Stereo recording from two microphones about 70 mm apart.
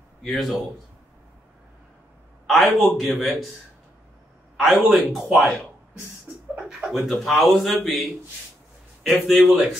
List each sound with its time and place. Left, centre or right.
0.2 s speech: centre
2.4 s a man's voice: centre
4.6 s speech: centre
6.3 s a sound: right
6.7 s speech: centre